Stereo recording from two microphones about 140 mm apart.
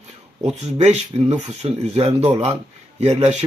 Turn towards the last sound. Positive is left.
turn(degrees=-50)  # may be behind; listen again after turning